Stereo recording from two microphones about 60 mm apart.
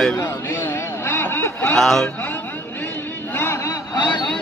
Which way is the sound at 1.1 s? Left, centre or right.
Left.